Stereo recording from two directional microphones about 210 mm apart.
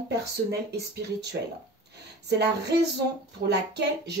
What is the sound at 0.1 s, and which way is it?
Speech, 50° right (ahead or behind).